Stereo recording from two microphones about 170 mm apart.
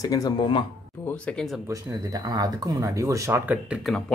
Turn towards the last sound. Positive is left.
turn(degrees=5)  # may be behind; listen again after turning